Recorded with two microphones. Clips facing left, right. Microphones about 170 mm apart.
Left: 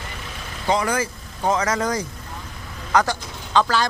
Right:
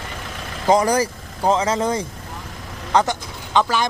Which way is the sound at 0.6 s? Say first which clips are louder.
Right 5 dB; 40° right (ahead or behind).